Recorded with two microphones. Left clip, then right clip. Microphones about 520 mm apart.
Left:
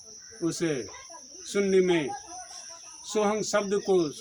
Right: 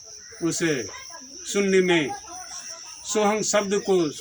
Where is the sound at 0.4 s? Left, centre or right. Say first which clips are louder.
Right 4 dB; left.